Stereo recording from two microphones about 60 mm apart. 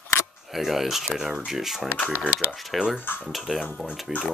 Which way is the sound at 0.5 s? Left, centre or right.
Centre.